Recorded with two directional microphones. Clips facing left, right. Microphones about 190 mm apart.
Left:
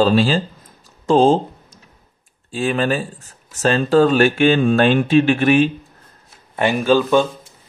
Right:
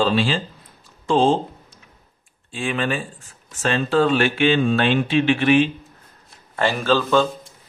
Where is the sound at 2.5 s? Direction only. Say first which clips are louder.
Left 5 dB; 40° left (ahead or behind).